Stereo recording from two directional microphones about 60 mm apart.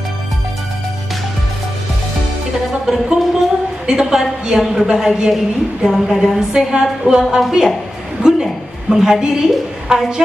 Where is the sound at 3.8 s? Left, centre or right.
Centre.